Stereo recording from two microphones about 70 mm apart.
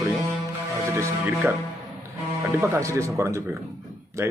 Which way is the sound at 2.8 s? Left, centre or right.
Right.